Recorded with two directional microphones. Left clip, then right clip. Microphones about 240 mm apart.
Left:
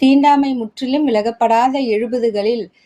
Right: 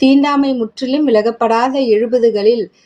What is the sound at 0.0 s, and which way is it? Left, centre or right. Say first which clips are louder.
A woman's voice: even; left.